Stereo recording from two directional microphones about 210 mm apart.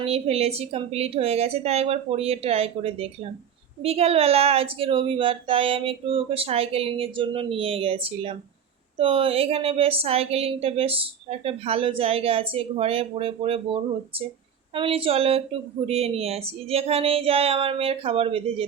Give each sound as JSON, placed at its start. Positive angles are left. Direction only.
{"t": 0.0, "sound": "a woman's voice", "side_deg": -30}
{"t": 14.8, "sound": "a woman's voice", "side_deg": -25}